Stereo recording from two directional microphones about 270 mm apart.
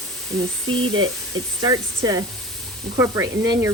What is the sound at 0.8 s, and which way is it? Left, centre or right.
Speech, right.